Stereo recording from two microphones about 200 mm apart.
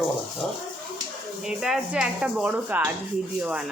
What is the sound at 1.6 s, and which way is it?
Speech, 5° right (ahead or behind).